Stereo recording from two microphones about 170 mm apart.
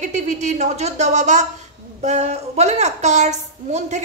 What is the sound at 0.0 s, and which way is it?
A woman's voice, 45° right (ahead or behind).